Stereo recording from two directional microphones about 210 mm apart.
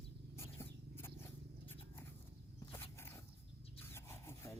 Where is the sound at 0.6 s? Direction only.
10° left (ahead or behind).